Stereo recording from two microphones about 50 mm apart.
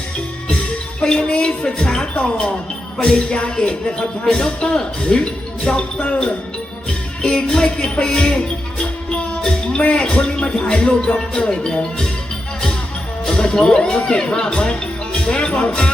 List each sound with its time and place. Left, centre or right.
1.0 s music: centre
2.0 s speech: left
7.2 s music: centre
9.9 s speech: centre
13.2 s speech: centre